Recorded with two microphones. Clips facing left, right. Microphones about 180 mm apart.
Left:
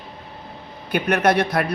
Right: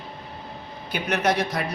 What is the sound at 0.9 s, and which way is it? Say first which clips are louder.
Speech: left 5 dB; 55° left (ahead or behind).